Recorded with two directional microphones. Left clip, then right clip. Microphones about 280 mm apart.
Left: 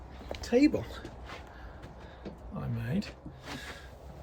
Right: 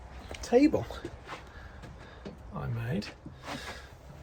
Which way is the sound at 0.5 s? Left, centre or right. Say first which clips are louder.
Right 2 dB; centre.